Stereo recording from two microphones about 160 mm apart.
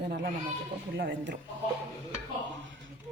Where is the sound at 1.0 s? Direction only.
90° right.